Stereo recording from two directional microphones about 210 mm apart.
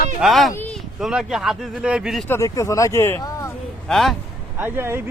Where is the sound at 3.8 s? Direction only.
Centre (ahead or behind).